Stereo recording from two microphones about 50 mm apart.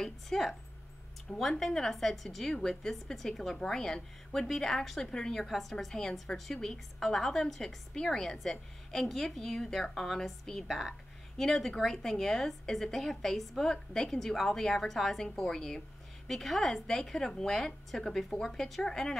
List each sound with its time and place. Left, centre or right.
0.0 s a woman's voice: centre
1.3 s speech: left
1.7 s a woman's voice: centre
5.4 s a woman's voice: centre